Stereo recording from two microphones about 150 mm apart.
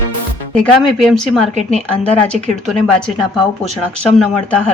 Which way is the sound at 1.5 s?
50° right (ahead or behind).